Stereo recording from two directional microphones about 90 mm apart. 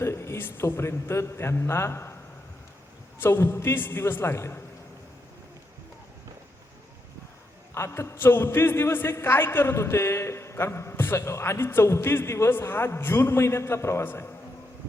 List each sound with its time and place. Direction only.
0.0 s a man's voice: 30° left (ahead or behind)
3.2 s a man's voice: 25° left (ahead or behind)
7.7 s a man's voice: 30° left (ahead or behind)